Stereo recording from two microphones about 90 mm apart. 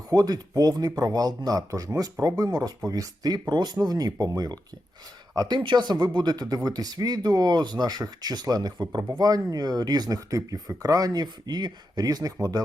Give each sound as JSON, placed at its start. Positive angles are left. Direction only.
{"t": 0.1, "sound": "speech", "side_deg": -45}